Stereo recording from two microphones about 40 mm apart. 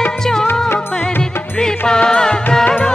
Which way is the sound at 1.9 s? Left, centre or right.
Centre.